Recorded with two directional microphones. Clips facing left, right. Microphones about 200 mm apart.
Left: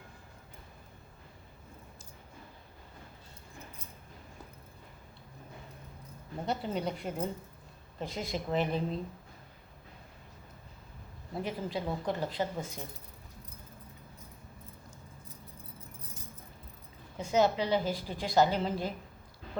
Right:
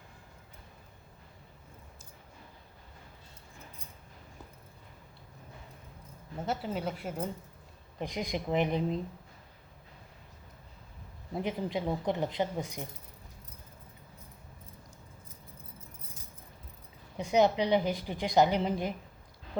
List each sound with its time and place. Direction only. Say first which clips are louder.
6.4 s a woman's voice: even; 5° right (ahead or behind)
7.9 s speech: right 2 dB; 15° right (ahead or behind)
11.3 s a woman's voice: right 2 dB; 20° right (ahead or behind)
17.2 s a woman's voice: right 2 dB; 20° right (ahead or behind)